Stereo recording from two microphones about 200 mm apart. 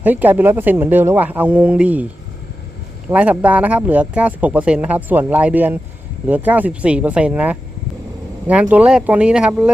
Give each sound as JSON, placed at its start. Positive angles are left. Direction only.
{"t": 0.0, "sound": "speech", "side_deg": -10}
{"t": 3.1, "sound": "speech", "side_deg": -5}